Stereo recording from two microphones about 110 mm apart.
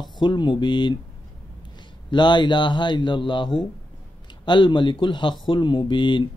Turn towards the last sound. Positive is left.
turn(degrees=45)  # may be behind; listen again after turning